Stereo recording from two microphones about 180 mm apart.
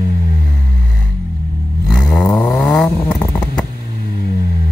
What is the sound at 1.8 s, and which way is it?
Vehicle, 5° left (ahead or behind).